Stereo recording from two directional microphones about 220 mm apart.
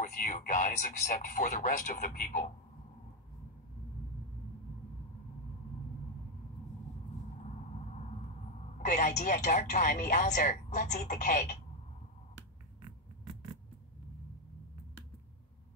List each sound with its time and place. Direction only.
0.0 s speech: 35° left (ahead or behind)
8.7 s speech: 35° left (ahead or behind)